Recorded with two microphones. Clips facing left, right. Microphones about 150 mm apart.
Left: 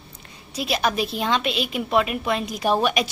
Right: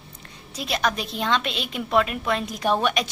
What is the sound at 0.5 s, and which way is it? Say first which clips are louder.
A woman's voice: left 3 dB; 5° left (ahead or behind).